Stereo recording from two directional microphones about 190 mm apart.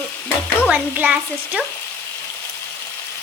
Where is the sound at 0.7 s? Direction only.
10° right (ahead or behind).